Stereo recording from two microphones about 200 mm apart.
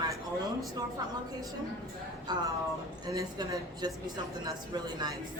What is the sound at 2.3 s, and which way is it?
A woman's voice, 20° right (ahead or behind).